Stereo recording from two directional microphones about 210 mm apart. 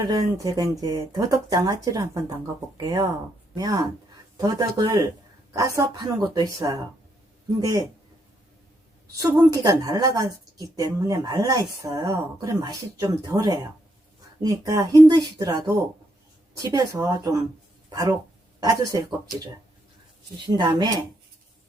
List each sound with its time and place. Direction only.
0.1 s a woman's voice: 15° right (ahead or behind)
9.1 s a woman's voice: 15° right (ahead or behind)
20.4 s speech: 20° right (ahead or behind)